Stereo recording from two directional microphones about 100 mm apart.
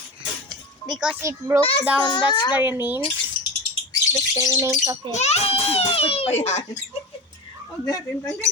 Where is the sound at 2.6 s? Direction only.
20° right (ahead or behind).